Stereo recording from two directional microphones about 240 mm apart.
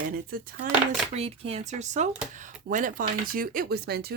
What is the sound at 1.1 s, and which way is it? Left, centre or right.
Speech, right.